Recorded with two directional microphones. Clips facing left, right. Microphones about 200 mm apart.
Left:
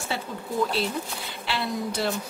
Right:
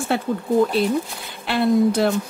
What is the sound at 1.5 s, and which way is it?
Speech, 50° right (ahead or behind).